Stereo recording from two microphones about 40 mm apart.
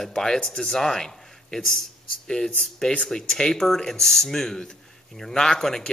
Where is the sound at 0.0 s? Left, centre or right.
Centre.